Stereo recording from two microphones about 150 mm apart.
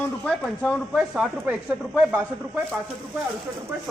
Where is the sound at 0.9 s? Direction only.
5° right (ahead or behind).